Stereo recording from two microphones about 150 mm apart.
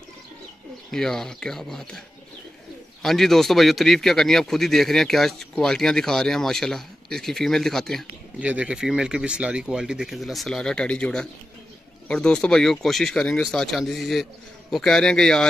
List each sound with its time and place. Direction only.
0.9 s speech: 5° left (ahead or behind)
3.0 s speech: centre (ahead or behind)
8.4 s speech: 10° right (ahead or behind)